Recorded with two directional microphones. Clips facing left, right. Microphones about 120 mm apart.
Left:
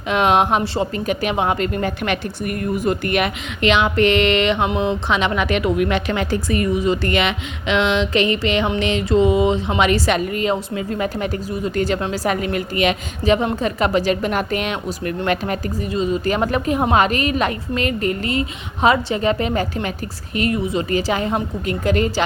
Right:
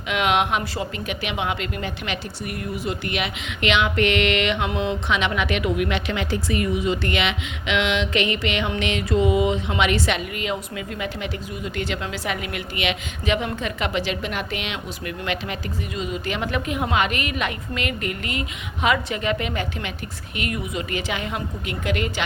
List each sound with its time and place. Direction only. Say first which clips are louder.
0.1 s speech: left 5 dB; 35° left (ahead or behind)
3.6 s speech: left 5 dB; 40° left (ahead or behind)